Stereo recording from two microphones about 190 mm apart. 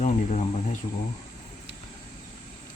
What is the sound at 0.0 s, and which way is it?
Speech, 35° left (ahead or behind).